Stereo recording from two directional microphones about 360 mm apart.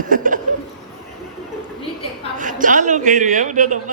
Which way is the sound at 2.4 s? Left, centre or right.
Right.